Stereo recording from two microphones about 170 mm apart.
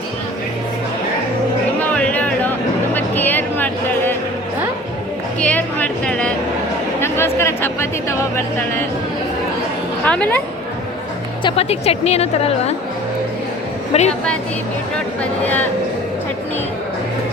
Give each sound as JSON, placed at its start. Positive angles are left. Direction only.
{"t": 1.8, "sound": "music", "side_deg": 10}
{"t": 5.4, "sound": "a sound", "side_deg": 10}
{"t": 7.0, "sound": "speech", "side_deg": 15}
{"t": 10.1, "sound": "speech", "side_deg": 10}
{"t": 11.4, "sound": "a woman's voice", "side_deg": 35}
{"t": 13.9, "sound": "a woman's voice", "side_deg": 40}
{"t": 15.2, "sound": "speech", "side_deg": 10}